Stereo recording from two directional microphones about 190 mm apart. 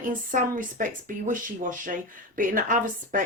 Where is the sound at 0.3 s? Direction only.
45° right (ahead or behind).